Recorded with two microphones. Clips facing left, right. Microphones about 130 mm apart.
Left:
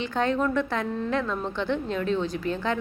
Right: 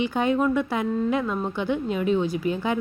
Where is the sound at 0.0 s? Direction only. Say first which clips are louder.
Right 3 dB; 10° right (ahead or behind).